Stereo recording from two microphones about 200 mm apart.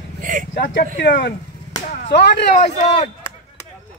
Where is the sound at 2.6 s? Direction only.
35° left (ahead or behind).